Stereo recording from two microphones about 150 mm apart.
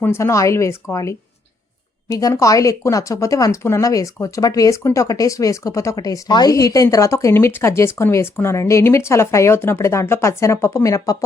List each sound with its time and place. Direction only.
0.0 s speech: 15° left (ahead or behind)